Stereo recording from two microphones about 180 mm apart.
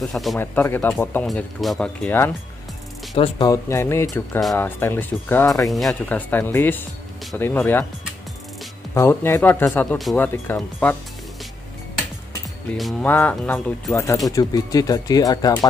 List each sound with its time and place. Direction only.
0.0 s speech: centre (ahead or behind)
0.4 s speech: 10° left (ahead or behind)
3.2 s speech: 25° left (ahead or behind)
3.6 s speech: 15° left (ahead or behind)
4.1 s speech: centre (ahead or behind)
4.6 s speech: 10° left (ahead or behind)
5.7 s speech: centre (ahead or behind)
8.9 s speech: 15° left (ahead or behind)
12.7 s speech: centre (ahead or behind)
14.0 s speech: 20° left (ahead or behind)